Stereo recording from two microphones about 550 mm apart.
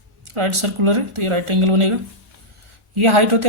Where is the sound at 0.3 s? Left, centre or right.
Right.